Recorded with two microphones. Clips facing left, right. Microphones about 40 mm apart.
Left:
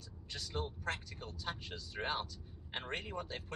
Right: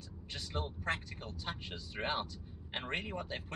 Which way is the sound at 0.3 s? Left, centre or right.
Right.